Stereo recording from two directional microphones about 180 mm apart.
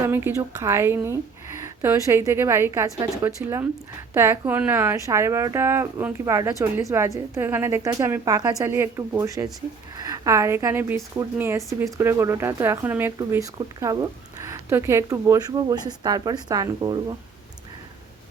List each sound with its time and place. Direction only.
0.0 s speech: 10° right (ahead or behind)